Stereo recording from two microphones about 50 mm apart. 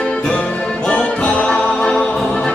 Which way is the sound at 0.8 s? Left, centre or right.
Left.